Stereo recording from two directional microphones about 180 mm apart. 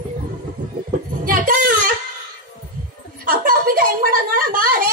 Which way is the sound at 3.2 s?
55° right (ahead or behind).